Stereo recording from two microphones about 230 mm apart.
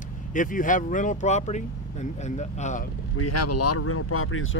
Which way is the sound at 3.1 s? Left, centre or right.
Left.